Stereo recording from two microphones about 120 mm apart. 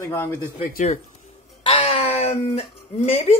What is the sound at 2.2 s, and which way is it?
Speech, 60° left (ahead or behind).